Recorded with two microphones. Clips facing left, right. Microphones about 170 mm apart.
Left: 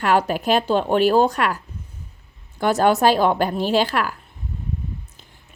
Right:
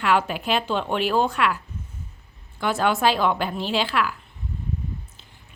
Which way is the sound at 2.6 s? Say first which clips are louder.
Left 5 dB; 40° left (ahead or behind).